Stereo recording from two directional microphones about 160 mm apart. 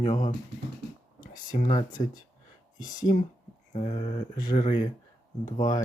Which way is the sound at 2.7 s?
25° left (ahead or behind).